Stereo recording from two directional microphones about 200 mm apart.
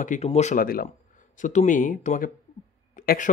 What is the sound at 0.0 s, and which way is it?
Speech, 35° left (ahead or behind).